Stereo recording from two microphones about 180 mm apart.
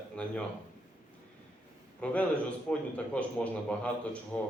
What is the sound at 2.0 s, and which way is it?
A man's voice, 5° left (ahead or behind).